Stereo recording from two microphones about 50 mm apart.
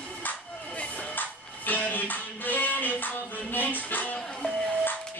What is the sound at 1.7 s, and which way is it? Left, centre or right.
Music, left.